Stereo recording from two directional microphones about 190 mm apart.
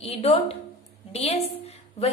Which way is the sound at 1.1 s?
35° left (ahead or behind).